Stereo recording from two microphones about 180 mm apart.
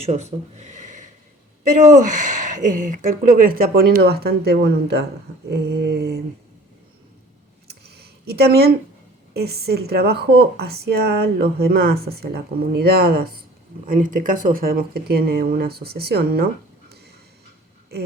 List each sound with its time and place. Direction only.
0.0 s speech: 35° right (ahead or behind); by 5.0 s 65° right (ahead or behind)
5.5 s mantra: 70° right (ahead or behind)
7.7 s a sound: 65° right (ahead or behind)
9.3 s speech: 60° right (ahead or behind)
13.8 s speech: 45° right (ahead or behind)